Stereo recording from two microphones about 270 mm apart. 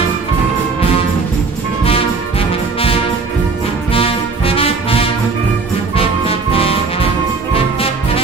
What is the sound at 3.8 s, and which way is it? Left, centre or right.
Music, left.